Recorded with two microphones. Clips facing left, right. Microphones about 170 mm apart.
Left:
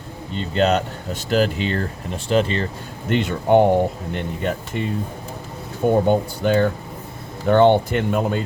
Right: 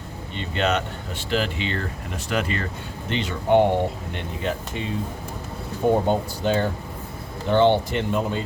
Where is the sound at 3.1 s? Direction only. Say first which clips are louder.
Left 4 dB; 50° left (ahead or behind).